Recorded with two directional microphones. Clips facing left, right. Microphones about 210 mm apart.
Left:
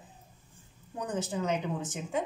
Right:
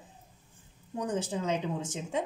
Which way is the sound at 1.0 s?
30° right (ahead or behind).